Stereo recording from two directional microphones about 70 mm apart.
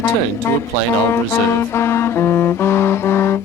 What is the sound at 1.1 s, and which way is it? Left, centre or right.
Music, left.